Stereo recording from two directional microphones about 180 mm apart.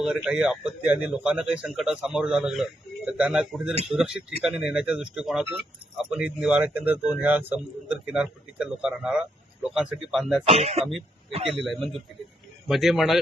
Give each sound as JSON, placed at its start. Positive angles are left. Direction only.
{"t": 0.0, "sound": "a man's voice", "side_deg": -5}
{"t": 10.4, "sound": "speech", "side_deg": -35}
{"t": 11.4, "sound": "a man's voice", "side_deg": 0}